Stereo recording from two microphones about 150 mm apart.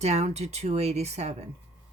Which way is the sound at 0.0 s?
45° right (ahead or behind).